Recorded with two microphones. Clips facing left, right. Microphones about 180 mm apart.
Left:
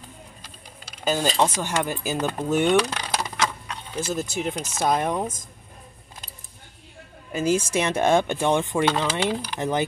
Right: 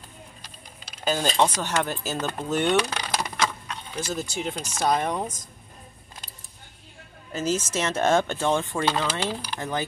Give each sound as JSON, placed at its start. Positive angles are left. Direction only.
{"t": 1.0, "sound": "speech", "side_deg": 5}
{"t": 2.8, "sound": "coin", "side_deg": 0}
{"t": 4.1, "sound": "speech", "side_deg": 5}
{"t": 7.3, "sound": "speech", "side_deg": 10}